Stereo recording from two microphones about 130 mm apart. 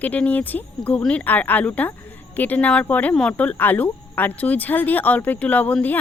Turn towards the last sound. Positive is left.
turn(degrees=10)  # may be behind; listen again after turning